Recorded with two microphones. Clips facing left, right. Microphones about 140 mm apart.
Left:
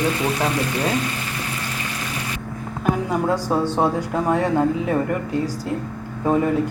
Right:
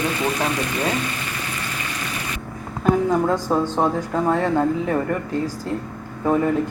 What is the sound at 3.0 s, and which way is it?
Speech, 10° left (ahead or behind).